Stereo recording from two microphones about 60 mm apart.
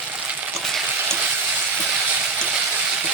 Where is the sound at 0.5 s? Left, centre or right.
Centre.